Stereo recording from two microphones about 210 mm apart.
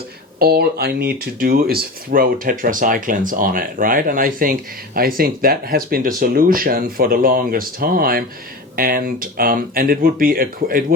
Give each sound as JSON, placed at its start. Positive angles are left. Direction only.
{"t": 0.3, "sound": "speech", "side_deg": -50}